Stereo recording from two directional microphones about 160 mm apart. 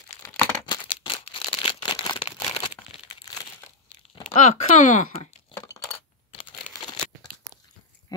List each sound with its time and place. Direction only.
0.2 s crumpling: 20° left (ahead or behind)
1.0 s a sound: 35° left (ahead or behind)
4.4 s speech: 45° left (ahead or behind)
6.7 s crumpling: 25° left (ahead or behind)